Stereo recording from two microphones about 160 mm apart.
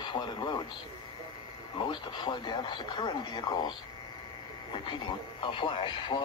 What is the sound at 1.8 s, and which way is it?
Speech, 30° left (ahead or behind).